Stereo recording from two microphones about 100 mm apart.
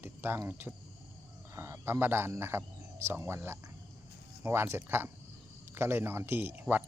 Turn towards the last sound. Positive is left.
turn(degrees=-20)  # may be behind; listen again after turning